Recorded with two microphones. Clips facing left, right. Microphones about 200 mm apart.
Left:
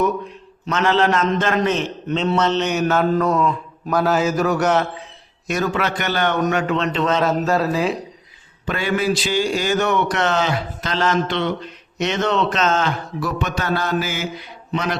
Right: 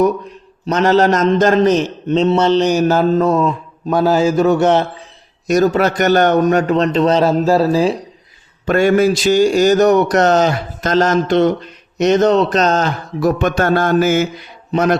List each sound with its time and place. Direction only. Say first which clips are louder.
0.7 s a man's voice: right 5 dB; 40° right (ahead or behind)
5.5 s a man's voice: right 8 dB; 40° right (ahead or behind)
8.6 s a man's voice: right 9 dB; 45° right (ahead or behind)